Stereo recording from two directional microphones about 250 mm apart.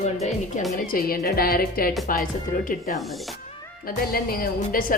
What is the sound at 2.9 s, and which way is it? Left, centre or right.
Speech, centre.